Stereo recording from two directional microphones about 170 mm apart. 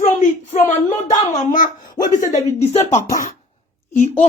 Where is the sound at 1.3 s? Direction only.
50° left (ahead or behind).